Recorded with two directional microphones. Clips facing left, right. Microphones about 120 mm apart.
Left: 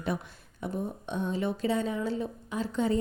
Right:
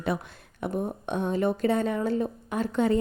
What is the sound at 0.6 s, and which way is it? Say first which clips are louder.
Speech: right 4 dB; 60° right (ahead or behind).